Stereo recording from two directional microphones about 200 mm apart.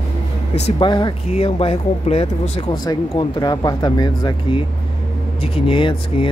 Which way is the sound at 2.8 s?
20° left (ahead or behind).